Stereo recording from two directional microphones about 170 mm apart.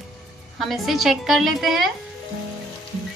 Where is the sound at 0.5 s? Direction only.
Centre (ahead or behind).